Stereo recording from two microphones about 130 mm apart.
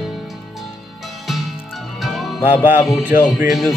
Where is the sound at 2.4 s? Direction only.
15° right (ahead or behind).